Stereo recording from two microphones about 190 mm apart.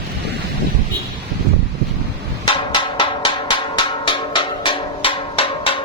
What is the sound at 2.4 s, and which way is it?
Hammer, 25° left (ahead or behind).